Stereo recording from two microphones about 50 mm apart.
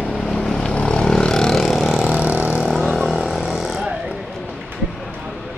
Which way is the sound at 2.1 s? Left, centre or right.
Right.